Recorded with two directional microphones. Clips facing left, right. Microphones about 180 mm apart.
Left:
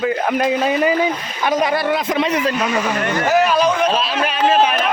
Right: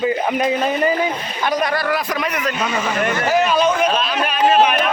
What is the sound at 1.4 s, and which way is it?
A man's voice, 20° left (ahead or behind).